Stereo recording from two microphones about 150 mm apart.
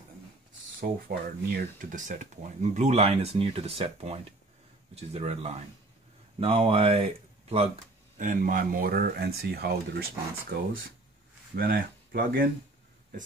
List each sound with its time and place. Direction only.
0.7 s speech: 80° right; by 7.7 s 40° right (ahead or behind)
8.2 s speech: 60° right (ahead or behind); by 10.0 s 90° right
11.5 s speech: 80° right